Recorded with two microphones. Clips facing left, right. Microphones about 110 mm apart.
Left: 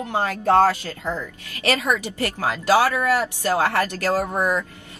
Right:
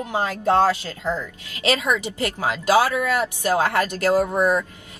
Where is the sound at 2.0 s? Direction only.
15° right (ahead or behind).